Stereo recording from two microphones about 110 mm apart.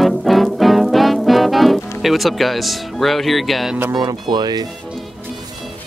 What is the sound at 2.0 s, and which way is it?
Speech, centre (ahead or behind).